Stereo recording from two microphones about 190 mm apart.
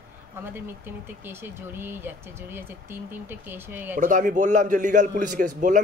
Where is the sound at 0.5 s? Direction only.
10° right (ahead or behind).